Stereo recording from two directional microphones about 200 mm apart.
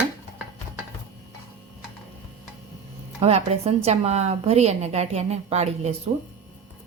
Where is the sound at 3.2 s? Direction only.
30° right (ahead or behind).